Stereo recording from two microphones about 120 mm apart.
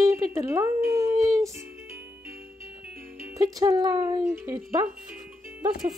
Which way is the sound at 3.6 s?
30° right (ahead or behind).